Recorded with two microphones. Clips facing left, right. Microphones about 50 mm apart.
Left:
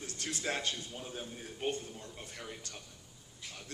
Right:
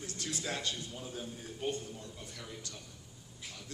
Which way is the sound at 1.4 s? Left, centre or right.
Left.